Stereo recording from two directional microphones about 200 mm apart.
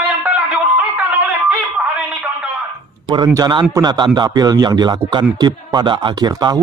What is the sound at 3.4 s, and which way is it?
Speech, 20° right (ahead or behind).